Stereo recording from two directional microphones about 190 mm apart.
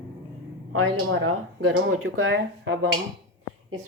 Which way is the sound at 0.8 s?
90° right.